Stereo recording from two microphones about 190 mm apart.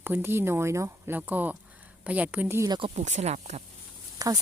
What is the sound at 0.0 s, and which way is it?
Speech, 10° right (ahead or behind).